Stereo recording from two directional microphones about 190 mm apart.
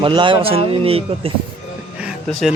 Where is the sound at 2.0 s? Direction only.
5° right (ahead or behind).